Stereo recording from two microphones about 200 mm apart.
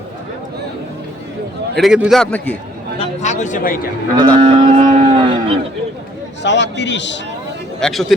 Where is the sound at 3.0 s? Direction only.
35° left (ahead or behind).